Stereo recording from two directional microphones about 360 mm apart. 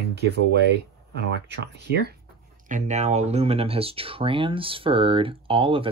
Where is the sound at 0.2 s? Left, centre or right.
Right.